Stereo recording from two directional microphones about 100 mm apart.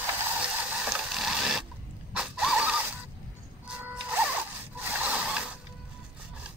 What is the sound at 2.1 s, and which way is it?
Mechanisms, 10° right (ahead or behind).